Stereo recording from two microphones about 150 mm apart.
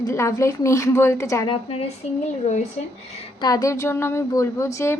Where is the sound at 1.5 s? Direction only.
40° left (ahead or behind).